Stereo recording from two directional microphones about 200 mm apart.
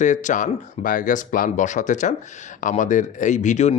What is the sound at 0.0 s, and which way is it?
Speech, 40° left (ahead or behind).